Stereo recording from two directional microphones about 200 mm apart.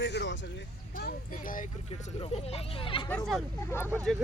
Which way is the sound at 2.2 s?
30° left (ahead or behind).